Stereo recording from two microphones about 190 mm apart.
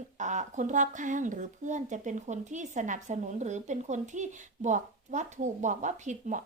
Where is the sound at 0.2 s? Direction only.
40° right (ahead or behind).